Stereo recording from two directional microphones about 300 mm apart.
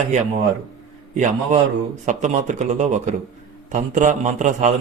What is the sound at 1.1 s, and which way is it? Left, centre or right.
Speech, right.